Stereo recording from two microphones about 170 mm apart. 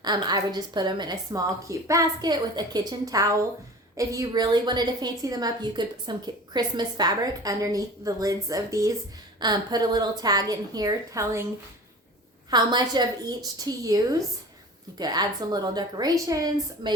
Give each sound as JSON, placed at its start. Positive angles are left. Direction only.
{"t": 0.0, "sound": "a woman's voice", "side_deg": -25}
{"t": 12.5, "sound": "a woman's voice", "side_deg": -25}